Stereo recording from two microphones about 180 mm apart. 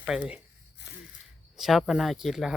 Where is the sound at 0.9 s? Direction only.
65° left (ahead or behind).